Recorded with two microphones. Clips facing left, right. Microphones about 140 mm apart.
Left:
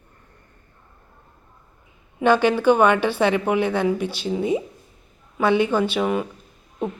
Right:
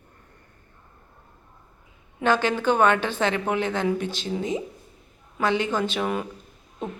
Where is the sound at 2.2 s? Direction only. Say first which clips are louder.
Left 5 dB; 10° left (ahead or behind).